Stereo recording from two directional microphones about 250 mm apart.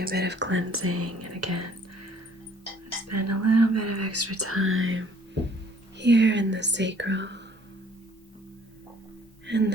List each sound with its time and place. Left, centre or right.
0.0 s speech: right
3.1 s speech: right
9.5 s speech: right